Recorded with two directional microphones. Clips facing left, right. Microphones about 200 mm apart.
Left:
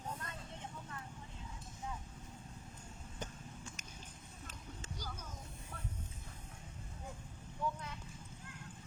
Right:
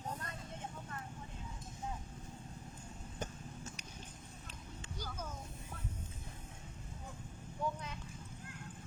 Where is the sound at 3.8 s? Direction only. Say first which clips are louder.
Right 2 dB; 45° left (ahead or behind).